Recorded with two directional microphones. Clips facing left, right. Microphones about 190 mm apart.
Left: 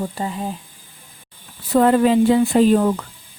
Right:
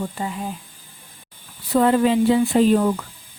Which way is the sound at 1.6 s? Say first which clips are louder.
Left 2 dB; 50° left (ahead or behind).